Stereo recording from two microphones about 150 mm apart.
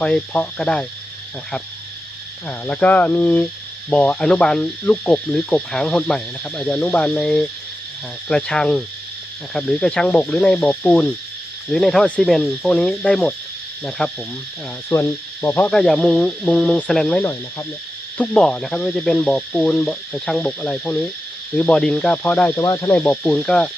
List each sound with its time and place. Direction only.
0.0 s speech: 5° left (ahead or behind)
2.5 s speech: 10° left (ahead or behind)
14.8 s speech: 15° left (ahead or behind)
15.7 s speech: 5° left (ahead or behind)